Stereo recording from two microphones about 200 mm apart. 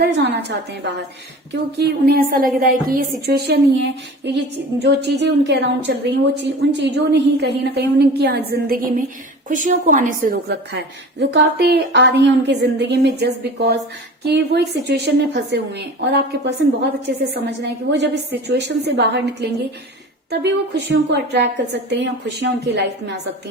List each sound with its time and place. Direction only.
0.0 s a woman's voice: 60° right (ahead or behind)
20.9 s a woman's voice: 60° right (ahead or behind)